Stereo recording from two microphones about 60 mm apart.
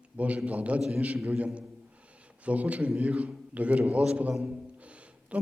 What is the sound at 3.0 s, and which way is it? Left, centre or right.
A man's voice, right.